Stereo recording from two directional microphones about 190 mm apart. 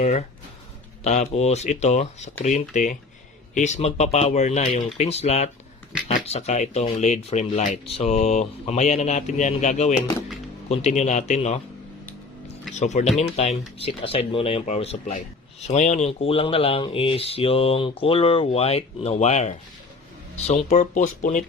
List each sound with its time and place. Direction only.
0.0 s speech: 35° left (ahead or behind)
12.8 s speech: 40° left (ahead or behind)